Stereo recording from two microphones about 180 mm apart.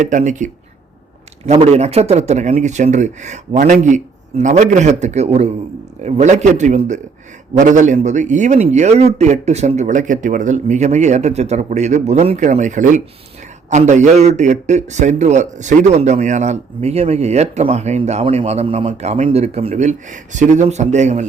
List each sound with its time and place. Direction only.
0.0 s a man's voice: 45° right (ahead or behind)